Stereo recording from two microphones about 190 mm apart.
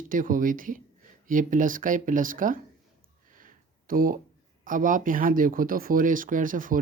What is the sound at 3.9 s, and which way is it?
Speech, 45° right (ahead or behind).